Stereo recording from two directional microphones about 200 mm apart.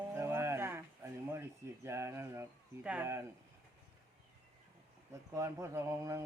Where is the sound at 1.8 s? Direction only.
15° right (ahead or behind).